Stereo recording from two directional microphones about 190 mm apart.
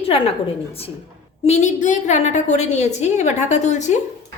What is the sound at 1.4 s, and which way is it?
A woman's voice, 40° left (ahead or behind).